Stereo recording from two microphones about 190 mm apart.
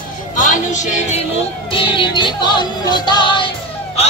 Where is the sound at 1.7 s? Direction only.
25° left (ahead or behind).